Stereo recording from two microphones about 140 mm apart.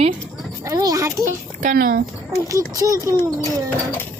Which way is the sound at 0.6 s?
25° right (ahead or behind).